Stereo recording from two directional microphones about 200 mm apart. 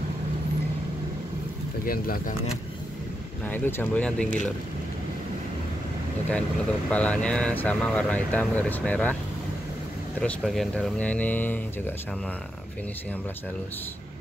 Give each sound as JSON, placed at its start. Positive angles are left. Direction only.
{"t": 1.9, "sound": "speech", "side_deg": 45}
{"t": 3.4, "sound": "speech", "side_deg": 10}
{"t": 6.9, "sound": "speech", "side_deg": 5}
{"t": 10.2, "sound": "speech", "side_deg": 0}